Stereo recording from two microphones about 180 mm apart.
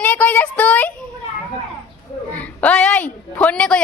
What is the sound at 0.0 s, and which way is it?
Child singing, 10° left (ahead or behind).